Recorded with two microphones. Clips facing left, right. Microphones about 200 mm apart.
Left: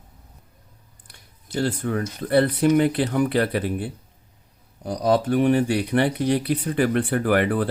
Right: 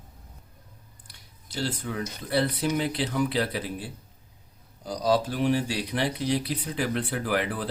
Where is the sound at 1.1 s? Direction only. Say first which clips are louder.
Left 8 dB; 55° left (ahead or behind).